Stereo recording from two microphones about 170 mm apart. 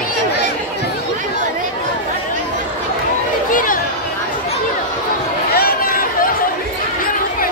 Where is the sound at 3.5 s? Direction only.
50° left (ahead or behind).